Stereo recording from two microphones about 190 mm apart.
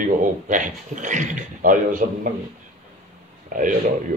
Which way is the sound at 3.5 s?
40° right (ahead or behind).